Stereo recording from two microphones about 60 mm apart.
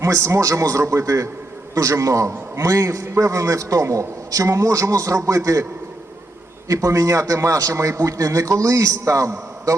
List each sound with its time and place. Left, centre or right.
0.0 s a man's voice: right
6.7 s a man's voice: right